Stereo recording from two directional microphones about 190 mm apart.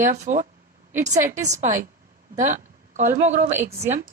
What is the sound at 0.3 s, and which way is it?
A woman's voice, 40° right (ahead or behind).